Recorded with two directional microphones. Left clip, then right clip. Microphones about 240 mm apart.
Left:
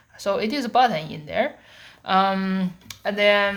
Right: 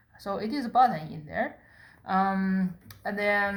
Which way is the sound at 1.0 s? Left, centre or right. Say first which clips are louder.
Left 7 dB; left.